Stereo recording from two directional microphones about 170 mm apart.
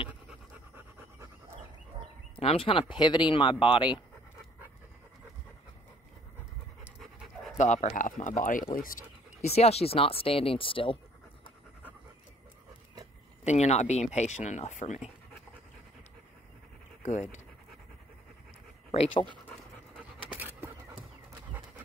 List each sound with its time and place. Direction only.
0.3 s pant: 10° right (ahead or behind)
2.4 s speech: 30° left (ahead or behind)
6.8 s pant: centre (ahead or behind)
7.5 s speech: 45° left (ahead or behind)
9.4 s speech: 35° left (ahead or behind)
13.4 s speech: 40° left (ahead or behind)
17.0 s speech: 45° left (ahead or behind)
18.9 s speech: 30° left (ahead or behind)
20.0 s a sound: 10° right (ahead or behind)